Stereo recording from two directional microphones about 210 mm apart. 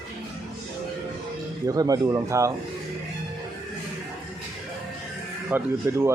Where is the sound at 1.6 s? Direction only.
15° right (ahead or behind).